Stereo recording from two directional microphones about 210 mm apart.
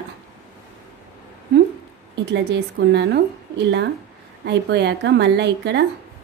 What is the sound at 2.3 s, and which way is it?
A woman's voice, 55° right (ahead or behind).